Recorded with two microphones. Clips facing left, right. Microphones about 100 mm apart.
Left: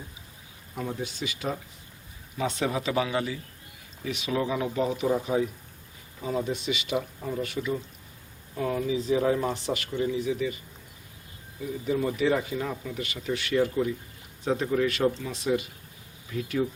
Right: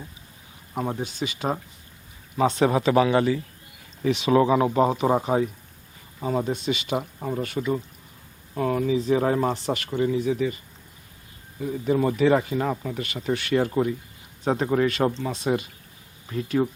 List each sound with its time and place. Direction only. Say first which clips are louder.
0.7 s speech: right 5 dB; 45° right (ahead or behind)
1.0 s speech: right 4 dB; 30° right (ahead or behind)
2.4 s speech: right 8 dB; 45° right (ahead or behind)
11.6 s speech: right 5 dB; 50° right (ahead or behind)